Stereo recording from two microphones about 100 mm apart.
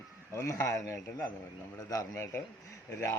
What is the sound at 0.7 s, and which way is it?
A man's voice, 30° left (ahead or behind).